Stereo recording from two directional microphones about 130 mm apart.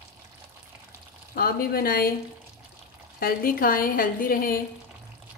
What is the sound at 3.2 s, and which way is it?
A woman's voice, 90° left.